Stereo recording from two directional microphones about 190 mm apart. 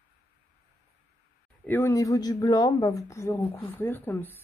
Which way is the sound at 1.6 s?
10° left (ahead or behind).